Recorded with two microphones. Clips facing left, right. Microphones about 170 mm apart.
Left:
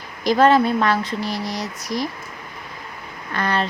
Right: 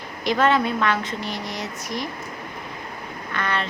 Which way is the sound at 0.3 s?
35° left (ahead or behind).